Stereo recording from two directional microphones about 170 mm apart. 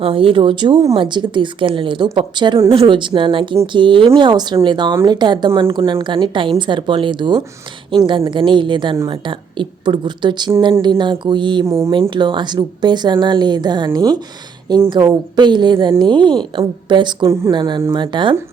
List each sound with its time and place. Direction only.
0.0 s a woman's voice: 30° right (ahead or behind)
11.6 s speech: 15° right (ahead or behind)
12.1 s a woman's voice: 25° right (ahead or behind)